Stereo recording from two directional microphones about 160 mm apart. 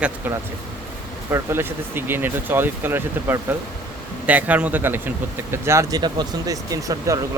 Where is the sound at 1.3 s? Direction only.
15° right (ahead or behind).